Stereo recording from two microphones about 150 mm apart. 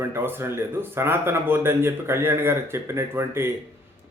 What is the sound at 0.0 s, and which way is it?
A man's voice, 15° right (ahead or behind).